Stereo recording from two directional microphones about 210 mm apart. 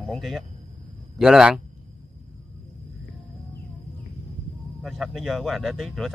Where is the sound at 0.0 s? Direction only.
Centre (ahead or behind).